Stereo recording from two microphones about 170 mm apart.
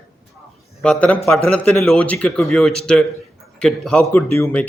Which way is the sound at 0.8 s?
5° left (ahead or behind).